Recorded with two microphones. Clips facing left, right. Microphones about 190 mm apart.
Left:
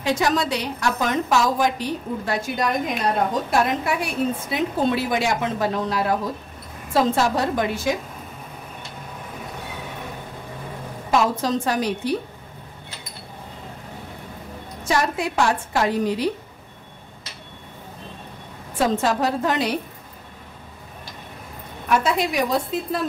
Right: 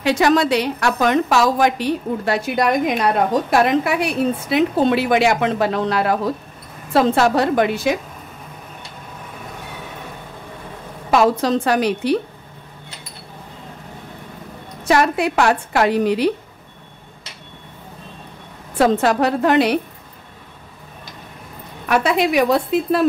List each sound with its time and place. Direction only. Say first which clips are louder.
0.0 s a woman's voice: right 6 dB; 70° right (ahead or behind)
11.1 s a woman's voice: right 5 dB; 70° right (ahead or behind)
14.9 s a woman's voice: right 6 dB; 65° right (ahead or behind)
18.8 s a woman's voice: right 5 dB; 65° right (ahead or behind)
21.8 s a woman's voice: right 4 dB; 70° right (ahead or behind)